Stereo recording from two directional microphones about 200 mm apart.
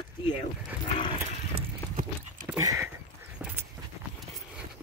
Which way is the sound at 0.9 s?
25° left (ahead or behind).